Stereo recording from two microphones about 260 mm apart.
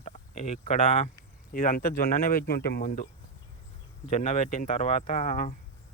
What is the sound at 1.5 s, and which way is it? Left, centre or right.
Speech, left.